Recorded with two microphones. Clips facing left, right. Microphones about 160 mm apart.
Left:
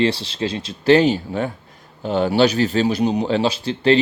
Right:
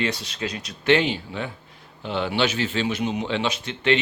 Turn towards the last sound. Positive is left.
turn(degrees=35)  # may be behind; listen again after turning